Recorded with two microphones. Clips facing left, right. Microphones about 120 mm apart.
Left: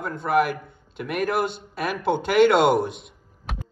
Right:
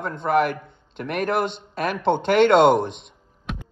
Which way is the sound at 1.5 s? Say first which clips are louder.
Right 2 dB; 5° left (ahead or behind).